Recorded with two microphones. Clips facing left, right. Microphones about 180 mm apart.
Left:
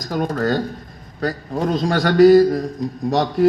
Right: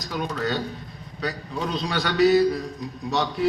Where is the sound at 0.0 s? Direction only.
45° left (ahead or behind).